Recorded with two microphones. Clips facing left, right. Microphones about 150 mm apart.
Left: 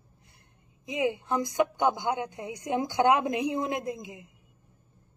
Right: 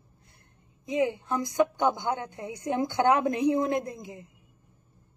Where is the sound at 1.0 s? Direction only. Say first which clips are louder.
Even; 20° left (ahead or behind).